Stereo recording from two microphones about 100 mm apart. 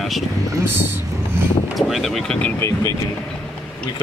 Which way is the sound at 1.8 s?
Centre (ahead or behind).